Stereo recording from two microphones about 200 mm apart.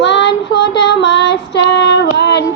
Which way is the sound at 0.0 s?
60° left (ahead or behind).